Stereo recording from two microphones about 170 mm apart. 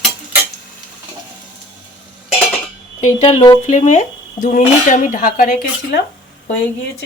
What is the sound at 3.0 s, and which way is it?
Speech, 35° left (ahead or behind).